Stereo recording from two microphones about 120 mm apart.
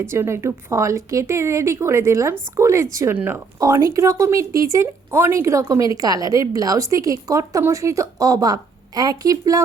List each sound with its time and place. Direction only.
0.0 s speech: 20° right (ahead or behind)
3.6 s speech: 30° right (ahead or behind)